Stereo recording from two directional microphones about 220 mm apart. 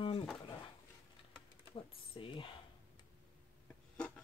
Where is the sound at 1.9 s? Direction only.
25° left (ahead or behind).